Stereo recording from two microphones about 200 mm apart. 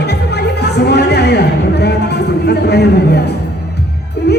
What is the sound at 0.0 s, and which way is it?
Music, 55° left (ahead or behind).